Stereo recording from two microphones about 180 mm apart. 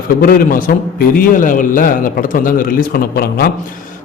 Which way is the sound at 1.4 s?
50° left (ahead or behind).